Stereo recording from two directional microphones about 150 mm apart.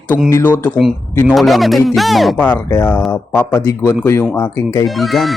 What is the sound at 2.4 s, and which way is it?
A man's voice, 15° left (ahead or behind).